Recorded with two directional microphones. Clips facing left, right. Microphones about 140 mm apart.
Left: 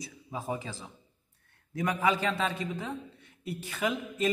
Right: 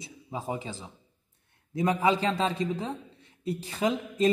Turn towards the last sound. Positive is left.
turn(degrees=-30)  # may be behind; listen again after turning